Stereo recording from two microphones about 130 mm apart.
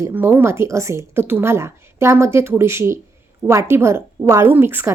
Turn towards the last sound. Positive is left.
turn(degrees=-15)  # may be behind; listen again after turning